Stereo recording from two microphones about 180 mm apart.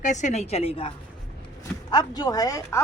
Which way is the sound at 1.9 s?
20° left (ahead or behind).